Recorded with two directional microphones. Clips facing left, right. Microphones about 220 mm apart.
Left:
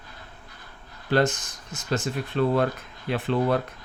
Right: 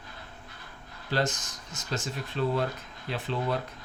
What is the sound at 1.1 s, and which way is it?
Speech, 55° left (ahead or behind).